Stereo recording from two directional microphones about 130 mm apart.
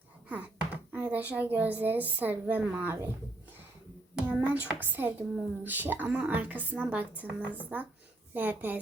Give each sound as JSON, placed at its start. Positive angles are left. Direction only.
{"t": 0.3, "sound": "speech", "side_deg": -10}
{"t": 4.1, "sound": "hands", "side_deg": -10}
{"t": 4.6, "sound": "a woman's voice", "side_deg": -10}